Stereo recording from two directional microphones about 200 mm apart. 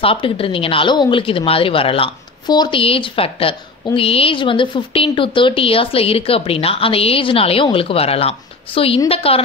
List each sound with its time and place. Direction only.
0.0 s speech: 25° left (ahead or behind)